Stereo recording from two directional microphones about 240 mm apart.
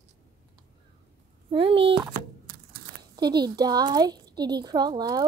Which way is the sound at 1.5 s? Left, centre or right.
Right.